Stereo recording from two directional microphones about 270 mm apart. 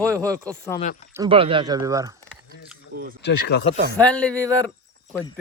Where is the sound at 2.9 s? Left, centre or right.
Right.